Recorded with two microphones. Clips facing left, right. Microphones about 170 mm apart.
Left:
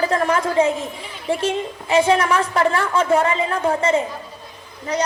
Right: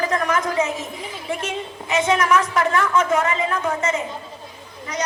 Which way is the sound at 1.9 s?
30° left (ahead or behind).